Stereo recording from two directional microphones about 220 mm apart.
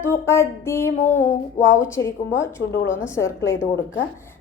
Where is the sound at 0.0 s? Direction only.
10° left (ahead or behind).